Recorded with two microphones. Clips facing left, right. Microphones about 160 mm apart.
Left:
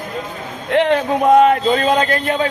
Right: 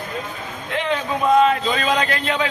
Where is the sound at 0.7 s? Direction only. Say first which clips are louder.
Left 8 dB; 65° left (ahead or behind); by 2.5 s 45° left (ahead or behind).